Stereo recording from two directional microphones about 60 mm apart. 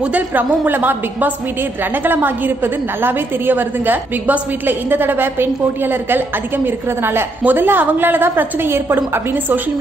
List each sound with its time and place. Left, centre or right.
0.0 s a woman's voice: right